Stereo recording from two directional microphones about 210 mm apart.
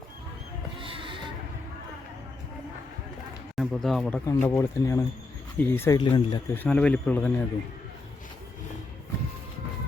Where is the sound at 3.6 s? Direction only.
Centre (ahead or behind).